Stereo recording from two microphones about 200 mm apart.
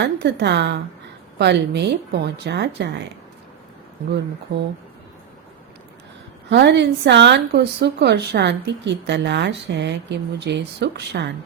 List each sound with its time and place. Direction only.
0.0 s speech: 60° right (ahead or behind)
6.5 s speech: 60° right (ahead or behind)